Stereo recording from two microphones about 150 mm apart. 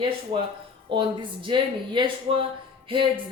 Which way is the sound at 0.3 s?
35° right (ahead or behind).